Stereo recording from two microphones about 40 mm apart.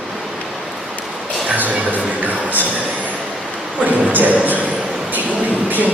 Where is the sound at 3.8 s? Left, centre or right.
Right.